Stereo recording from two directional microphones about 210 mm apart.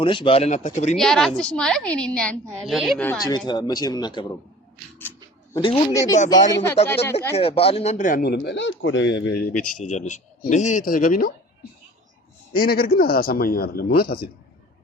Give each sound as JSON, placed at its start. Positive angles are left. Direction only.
{"t": 0.0, "sound": "speech", "side_deg": 25}
{"t": 0.9, "sound": "a woman's voice", "side_deg": 0}
{"t": 3.3, "sound": "speech", "side_deg": 20}
{"t": 5.5, "sound": "a woman's voice", "side_deg": 20}
{"t": 7.3, "sound": "speech", "side_deg": 25}
{"t": 9.9, "sound": "speech", "side_deg": 35}
{"t": 12.5, "sound": "a man's voice", "side_deg": 45}